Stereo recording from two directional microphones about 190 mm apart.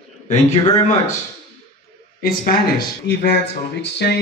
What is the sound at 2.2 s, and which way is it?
Speech, 50° left (ahead or behind).